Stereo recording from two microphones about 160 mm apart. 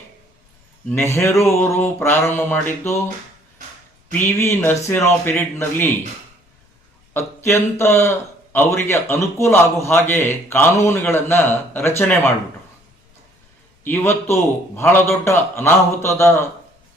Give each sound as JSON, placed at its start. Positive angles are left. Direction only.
{"t": 0.9, "sound": "a man's voice", "side_deg": 15}
{"t": 4.1, "sound": "a man's voice", "side_deg": 15}
{"t": 7.1, "sound": "a man's voice", "side_deg": 15}
{"t": 13.8, "sound": "a man's voice", "side_deg": 15}